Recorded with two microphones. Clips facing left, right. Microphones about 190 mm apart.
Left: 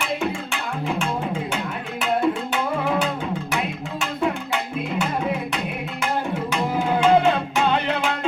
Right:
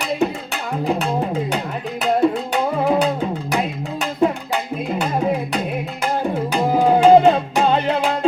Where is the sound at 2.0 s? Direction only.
35° right (ahead or behind).